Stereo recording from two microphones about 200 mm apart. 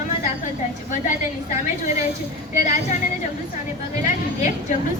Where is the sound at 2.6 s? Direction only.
40° left (ahead or behind).